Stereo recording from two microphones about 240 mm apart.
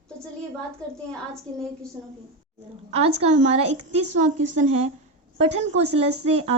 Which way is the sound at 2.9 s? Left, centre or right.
Right.